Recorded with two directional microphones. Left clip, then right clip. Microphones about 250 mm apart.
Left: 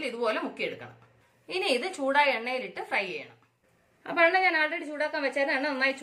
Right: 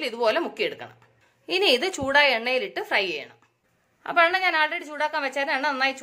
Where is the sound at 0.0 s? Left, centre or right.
Right.